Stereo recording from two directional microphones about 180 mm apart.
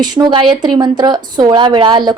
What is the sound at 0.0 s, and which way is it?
Speech, 25° right (ahead or behind).